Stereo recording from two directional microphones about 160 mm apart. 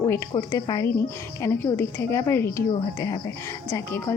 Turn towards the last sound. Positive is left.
turn(degrees=15)  # may be behind; listen again after turning